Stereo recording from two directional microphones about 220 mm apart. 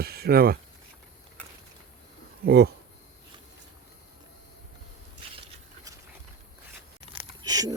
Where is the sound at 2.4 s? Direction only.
45° right (ahead or behind).